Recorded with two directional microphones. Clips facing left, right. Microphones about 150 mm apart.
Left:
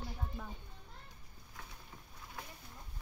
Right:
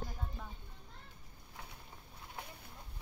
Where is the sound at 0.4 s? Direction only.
5° left (ahead or behind).